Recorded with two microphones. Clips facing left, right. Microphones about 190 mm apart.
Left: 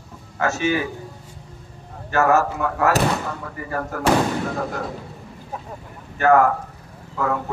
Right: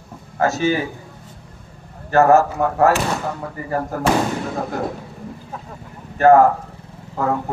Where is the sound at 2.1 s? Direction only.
35° right (ahead or behind).